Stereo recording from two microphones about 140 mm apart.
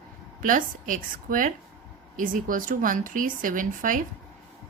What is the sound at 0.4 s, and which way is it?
A woman's voice, 70° right (ahead or behind).